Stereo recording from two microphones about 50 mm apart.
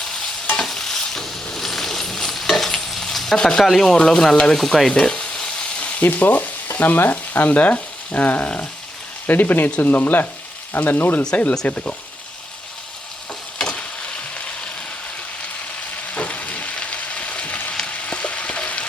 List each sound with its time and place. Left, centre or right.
0.5 s stir: centre
6.0 s frying: left
9.2 s speech: left
11.6 s speech: left
13.6 s frying: centre
16.1 s frying: left